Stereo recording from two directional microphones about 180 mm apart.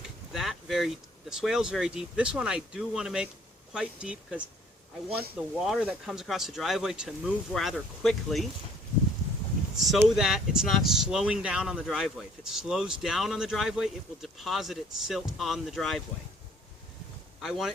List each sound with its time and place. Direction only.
0.3 s speech: centre (ahead or behind)
9.7 s speech: centre (ahead or behind)
17.4 s speech: centre (ahead or behind)